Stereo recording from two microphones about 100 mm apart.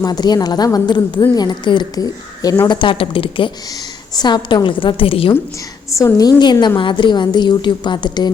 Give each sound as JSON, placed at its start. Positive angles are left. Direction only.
{"t": 0.0, "sound": "a woman's voice", "side_deg": 45}
{"t": 2.6, "sound": "a woman's voice", "side_deg": 55}
{"t": 4.1, "sound": "a woman's voice", "side_deg": 45}
{"t": 6.0, "sound": "a woman's voice", "side_deg": 35}